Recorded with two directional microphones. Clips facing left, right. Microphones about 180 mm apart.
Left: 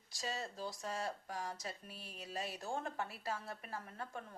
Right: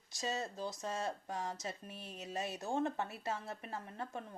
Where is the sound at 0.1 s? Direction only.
20° right (ahead or behind).